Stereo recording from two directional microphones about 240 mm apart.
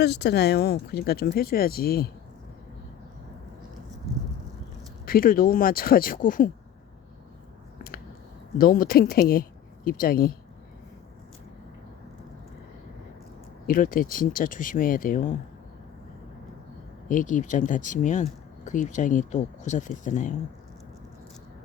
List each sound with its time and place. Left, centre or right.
0.0 s speech: left
5.0 s speech: left
8.5 s speech: left
13.7 s speech: left
17.1 s speech: left